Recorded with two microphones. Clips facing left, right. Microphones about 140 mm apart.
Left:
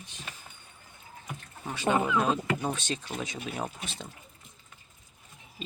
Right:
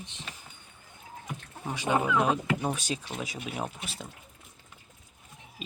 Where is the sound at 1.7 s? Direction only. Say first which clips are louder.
Even; 15° right (ahead or behind).